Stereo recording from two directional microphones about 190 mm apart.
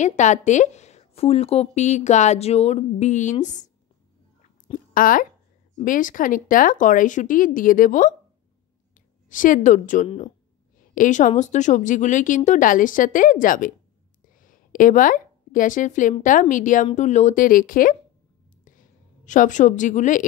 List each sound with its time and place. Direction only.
0.0 s a woman's voice: 40° left (ahead or behind)
4.9 s speech: 45° left (ahead or behind)
9.3 s a woman's voice: 45° left (ahead or behind)
19.2 s a woman's voice: 40° left (ahead or behind)